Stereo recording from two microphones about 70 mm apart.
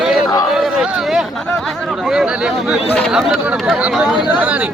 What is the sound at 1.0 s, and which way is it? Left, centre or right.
Speech, centre.